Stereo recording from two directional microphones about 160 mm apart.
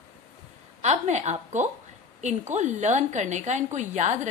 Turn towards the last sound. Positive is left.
turn(degrees=-45)  # may be behind; listen again after turning